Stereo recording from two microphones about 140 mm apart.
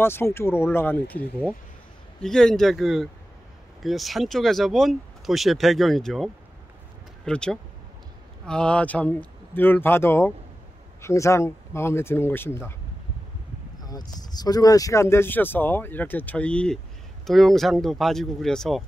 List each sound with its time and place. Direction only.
0.0 s speech: 15° left (ahead or behind)
13.8 s speech: 30° left (ahead or behind); by 18.9 s 5° left (ahead or behind)